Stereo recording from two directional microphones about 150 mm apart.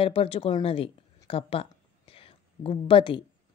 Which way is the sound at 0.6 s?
40° left (ahead or behind).